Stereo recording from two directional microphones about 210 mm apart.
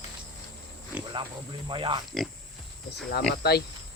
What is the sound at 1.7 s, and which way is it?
Speech, 20° right (ahead or behind).